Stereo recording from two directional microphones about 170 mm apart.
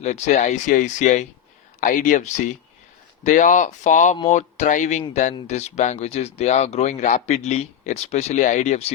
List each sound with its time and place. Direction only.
0.0 s speech: 40° left (ahead or behind)